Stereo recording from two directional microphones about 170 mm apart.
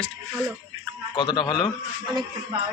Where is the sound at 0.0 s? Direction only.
5° left (ahead or behind).